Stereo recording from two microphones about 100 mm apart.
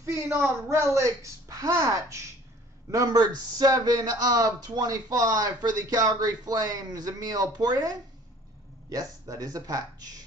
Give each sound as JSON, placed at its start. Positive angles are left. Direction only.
{"t": 0.0, "sound": "a man's voice", "side_deg": -25}